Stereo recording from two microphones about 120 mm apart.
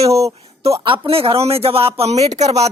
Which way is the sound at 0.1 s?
25° right (ahead or behind).